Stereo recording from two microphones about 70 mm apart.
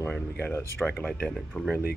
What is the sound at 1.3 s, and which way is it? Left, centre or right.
Speech, centre.